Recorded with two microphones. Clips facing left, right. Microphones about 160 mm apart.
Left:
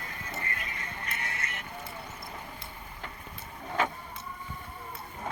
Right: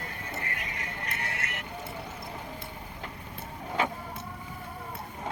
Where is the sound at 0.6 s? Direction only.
70° right (ahead or behind).